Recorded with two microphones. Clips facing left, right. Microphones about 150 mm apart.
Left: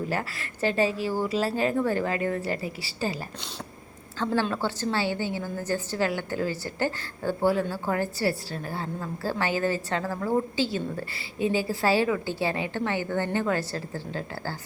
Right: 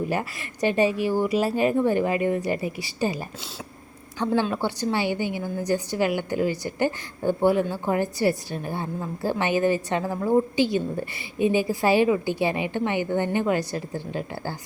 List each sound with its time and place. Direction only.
0.1 s a woman's voice: 15° right (ahead or behind)
4.2 s a woman's voice: 15° right (ahead or behind)